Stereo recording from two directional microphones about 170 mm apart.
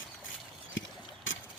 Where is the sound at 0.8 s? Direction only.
90° left.